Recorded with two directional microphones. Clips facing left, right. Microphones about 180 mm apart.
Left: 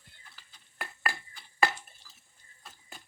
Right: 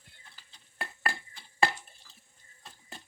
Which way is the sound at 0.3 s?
30° right (ahead or behind).